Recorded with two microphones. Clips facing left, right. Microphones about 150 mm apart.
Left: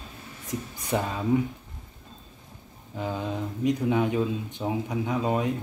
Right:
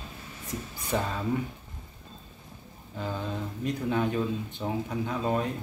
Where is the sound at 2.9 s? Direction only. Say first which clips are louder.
Left 3 dB; 15° left (ahead or behind).